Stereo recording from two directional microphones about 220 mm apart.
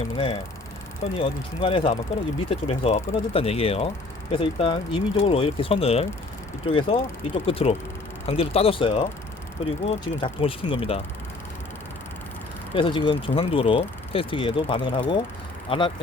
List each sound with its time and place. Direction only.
1.1 s speech: 25° left (ahead or behind)
12.7 s speech: 20° left (ahead or behind)